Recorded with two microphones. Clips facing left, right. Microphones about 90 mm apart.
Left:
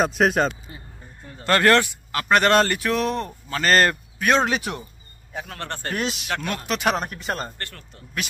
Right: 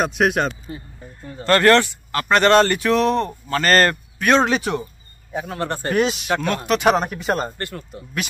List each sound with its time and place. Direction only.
0.0 s speech: centre (ahead or behind)
5.3 s a man's voice: 10° right (ahead or behind)
6.0 s speech: centre (ahead or behind)
7.4 s a man's voice: 15° right (ahead or behind)